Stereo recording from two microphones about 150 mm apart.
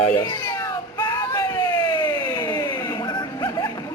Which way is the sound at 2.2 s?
30° left (ahead or behind).